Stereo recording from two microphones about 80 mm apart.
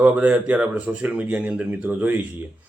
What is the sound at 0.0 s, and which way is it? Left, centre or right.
Speech, centre.